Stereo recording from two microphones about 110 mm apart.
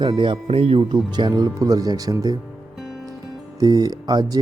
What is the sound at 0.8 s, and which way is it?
Speech, 40° right (ahead or behind).